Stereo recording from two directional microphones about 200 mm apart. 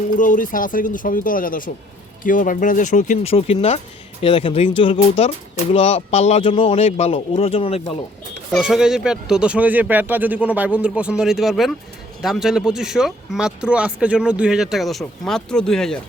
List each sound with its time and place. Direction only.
0.2 s speech: 40° left (ahead or behind)
8.5 s speech: 5° right (ahead or behind)